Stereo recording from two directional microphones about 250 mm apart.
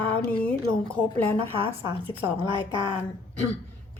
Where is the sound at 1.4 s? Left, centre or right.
Right.